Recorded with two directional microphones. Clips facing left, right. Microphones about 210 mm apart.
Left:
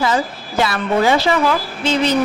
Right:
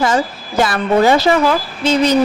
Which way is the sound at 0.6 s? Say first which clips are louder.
Right 3 dB; 45° right (ahead or behind).